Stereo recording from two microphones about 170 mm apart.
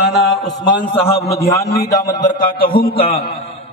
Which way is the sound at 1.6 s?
65° left (ahead or behind).